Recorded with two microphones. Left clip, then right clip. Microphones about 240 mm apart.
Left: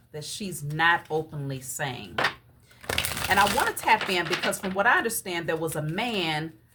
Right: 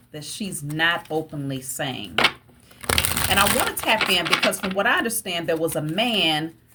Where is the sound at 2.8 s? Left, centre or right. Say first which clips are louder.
Right 6 dB; right.